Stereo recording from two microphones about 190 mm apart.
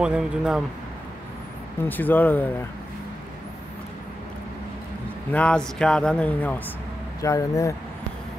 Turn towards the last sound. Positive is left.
turn(degrees=15)  # may be behind; listen again after turning